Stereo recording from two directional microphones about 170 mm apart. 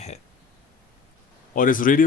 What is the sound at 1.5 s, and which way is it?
Speech, 55° left (ahead or behind).